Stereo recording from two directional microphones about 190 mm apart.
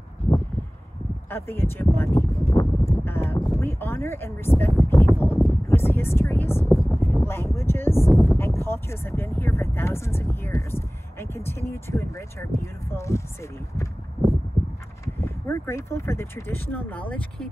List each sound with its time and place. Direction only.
1.3 s speech: 10° left (ahead or behind)
2.5 s a sound: 25° left (ahead or behind)
3.1 s speech: 10° left (ahead or behind)
8.1 s speech: centre (ahead or behind)
8.4 s speech: 15° left (ahead or behind)
15.1 s speech: 15° left (ahead or behind)